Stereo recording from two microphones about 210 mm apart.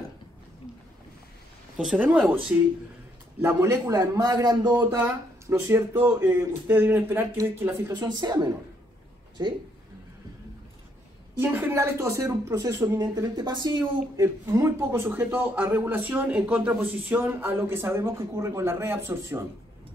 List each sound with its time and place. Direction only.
1.8 s speech: 5° right (ahead or behind)
8.0 s speech: 20° right (ahead or behind)
11.3 s speech: 10° right (ahead or behind)